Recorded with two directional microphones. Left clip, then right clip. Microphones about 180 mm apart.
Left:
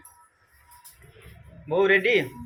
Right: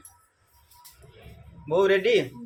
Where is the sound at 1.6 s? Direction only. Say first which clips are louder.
Left 1 dB; 20° right (ahead or behind).